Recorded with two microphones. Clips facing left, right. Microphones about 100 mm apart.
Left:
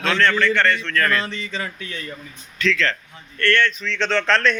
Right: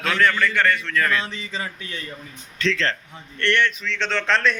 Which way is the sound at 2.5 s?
30° right (ahead or behind).